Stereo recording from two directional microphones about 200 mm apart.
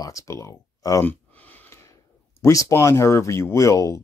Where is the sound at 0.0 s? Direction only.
15° left (ahead or behind).